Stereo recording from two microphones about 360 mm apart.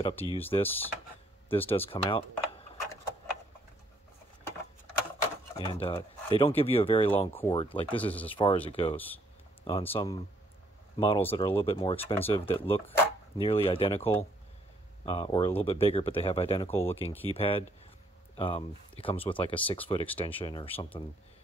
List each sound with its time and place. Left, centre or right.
0.0 s speech: centre
5.6 s speech: centre
8.0 s speech: centre